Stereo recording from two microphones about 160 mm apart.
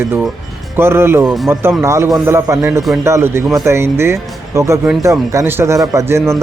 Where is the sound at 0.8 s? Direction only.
15° right (ahead or behind).